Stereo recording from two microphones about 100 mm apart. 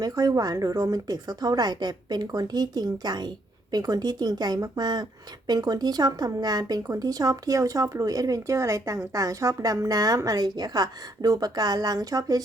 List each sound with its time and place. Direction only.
0.0 s a woman's voice: 40° right (ahead or behind)